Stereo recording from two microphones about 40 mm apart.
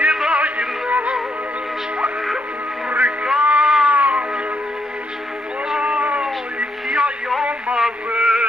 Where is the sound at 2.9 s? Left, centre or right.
Right.